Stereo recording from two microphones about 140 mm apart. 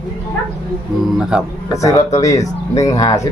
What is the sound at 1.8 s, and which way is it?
Speech, 25° left (ahead or behind).